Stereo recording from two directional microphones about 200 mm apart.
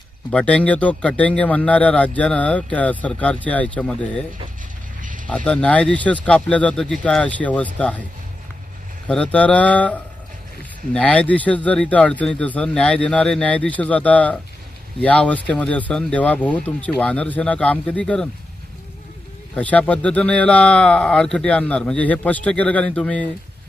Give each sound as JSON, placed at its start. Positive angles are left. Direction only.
{"t": 0.3, "sound": "a man's voice", "side_deg": 5}
{"t": 4.9, "sound": "a sound", "side_deg": -40}
{"t": 5.5, "sound": "a man's voice", "side_deg": 5}
{"t": 9.0, "sound": "a man's voice", "side_deg": 5}
{"t": 19.5, "sound": "a man's voice", "side_deg": 5}